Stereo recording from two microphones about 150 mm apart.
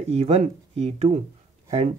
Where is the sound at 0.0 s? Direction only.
45° right (ahead or behind).